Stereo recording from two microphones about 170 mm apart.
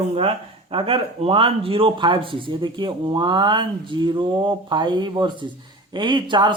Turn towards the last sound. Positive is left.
turn(degrees=-25)  # may be behind; listen again after turning